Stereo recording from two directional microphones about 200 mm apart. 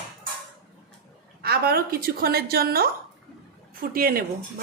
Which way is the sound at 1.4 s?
50° right (ahead or behind).